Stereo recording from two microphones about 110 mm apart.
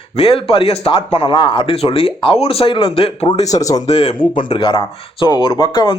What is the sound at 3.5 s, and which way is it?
Speech, 30° left (ahead or behind).